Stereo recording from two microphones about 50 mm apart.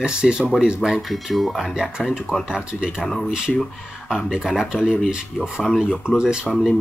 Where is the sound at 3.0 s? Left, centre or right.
Centre.